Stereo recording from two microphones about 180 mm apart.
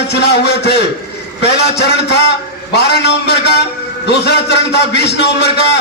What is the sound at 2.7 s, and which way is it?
Speech, 70° left (ahead or behind).